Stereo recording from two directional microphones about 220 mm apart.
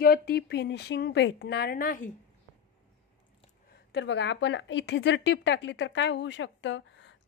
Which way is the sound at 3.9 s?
55° left (ahead or behind).